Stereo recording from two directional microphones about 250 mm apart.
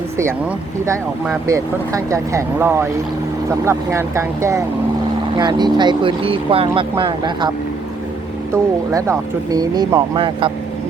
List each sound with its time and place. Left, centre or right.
1.5 s speech: centre
8.5 s speech: centre